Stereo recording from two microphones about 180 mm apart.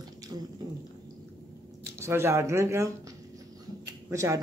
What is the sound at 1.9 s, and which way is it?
Speech, 15° right (ahead or behind).